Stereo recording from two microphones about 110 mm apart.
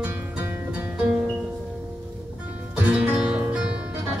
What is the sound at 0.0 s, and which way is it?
Music, 15° right (ahead or behind).